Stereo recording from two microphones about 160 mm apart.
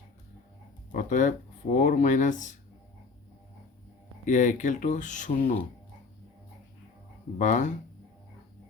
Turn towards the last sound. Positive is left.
turn(degrees=50)  # may be behind; listen again after turning